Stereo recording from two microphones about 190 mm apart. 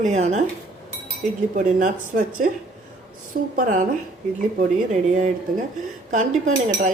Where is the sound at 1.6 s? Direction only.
45° right (ahead or behind).